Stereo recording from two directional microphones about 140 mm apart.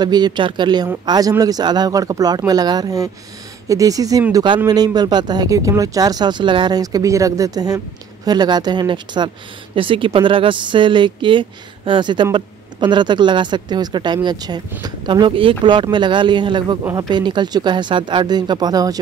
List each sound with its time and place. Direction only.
0.0 s speech: 30° right (ahead or behind)